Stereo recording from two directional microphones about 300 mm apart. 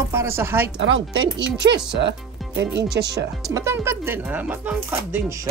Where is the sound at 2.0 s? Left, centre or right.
Right.